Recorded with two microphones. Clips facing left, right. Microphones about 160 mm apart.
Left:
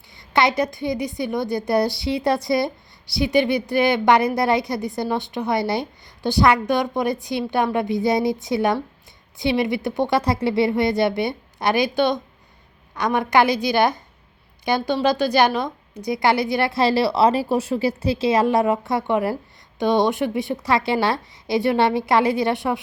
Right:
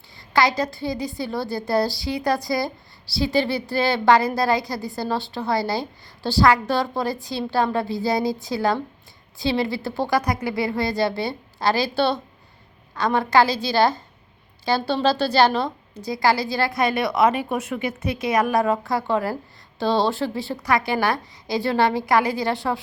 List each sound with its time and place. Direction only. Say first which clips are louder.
0.2 s a woman's voice: left 1 dB; 20° left (ahead or behind)